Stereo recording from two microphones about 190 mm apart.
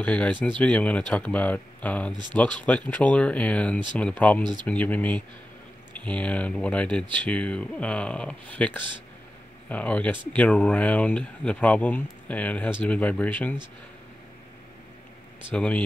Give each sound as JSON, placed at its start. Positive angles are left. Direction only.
{"t": 0.0, "sound": "speech", "side_deg": 5}
{"t": 4.4, "sound": "speech", "side_deg": -25}
{"t": 4.6, "sound": "speech", "side_deg": 10}
{"t": 15.5, "sound": "speech", "side_deg": 5}